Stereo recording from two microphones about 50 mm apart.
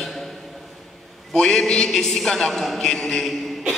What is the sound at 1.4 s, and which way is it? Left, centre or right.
A man's voice, centre.